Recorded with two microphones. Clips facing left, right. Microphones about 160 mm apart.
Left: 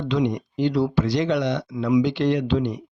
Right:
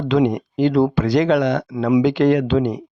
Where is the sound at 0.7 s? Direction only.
50° right (ahead or behind).